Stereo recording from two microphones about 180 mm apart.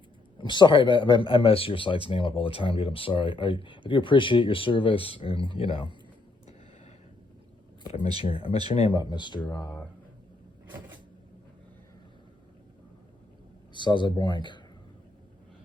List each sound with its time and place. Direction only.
0.3 s speech: 25° left (ahead or behind)
7.9 s speech: 30° left (ahead or behind); by 9.8 s 15° left (ahead or behind)
13.7 s speech: 25° left (ahead or behind)